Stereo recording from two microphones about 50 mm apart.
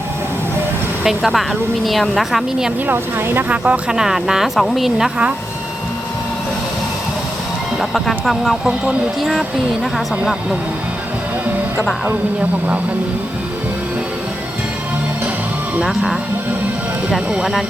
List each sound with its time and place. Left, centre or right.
1.0 s speech: centre
2.8 s speech: right
3.5 s speech: right; by 5.1 s centre
7.8 s speech: centre
15.8 s speech: centre